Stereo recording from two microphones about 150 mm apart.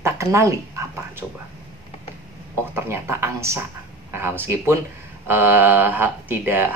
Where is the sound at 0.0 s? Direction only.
20° right (ahead or behind).